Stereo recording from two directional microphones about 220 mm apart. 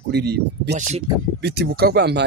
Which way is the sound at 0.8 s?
35° right (ahead or behind).